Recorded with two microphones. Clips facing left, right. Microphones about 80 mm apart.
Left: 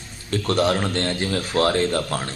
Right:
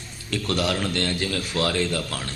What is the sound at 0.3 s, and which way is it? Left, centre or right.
Speech, left.